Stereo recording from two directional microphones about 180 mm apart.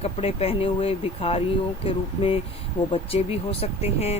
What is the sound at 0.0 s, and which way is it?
Speech, 35° left (ahead or behind).